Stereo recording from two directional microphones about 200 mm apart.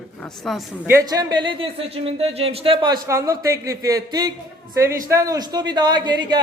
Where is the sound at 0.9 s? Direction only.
15° right (ahead or behind).